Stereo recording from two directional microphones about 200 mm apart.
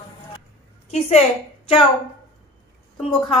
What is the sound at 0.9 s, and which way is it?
Speech, 30° left (ahead or behind).